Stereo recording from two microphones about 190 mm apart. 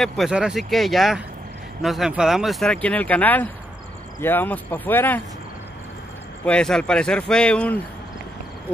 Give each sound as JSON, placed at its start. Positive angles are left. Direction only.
{"t": 0.0, "sound": "speech", "side_deg": 0}
{"t": 6.4, "sound": "speech", "side_deg": 5}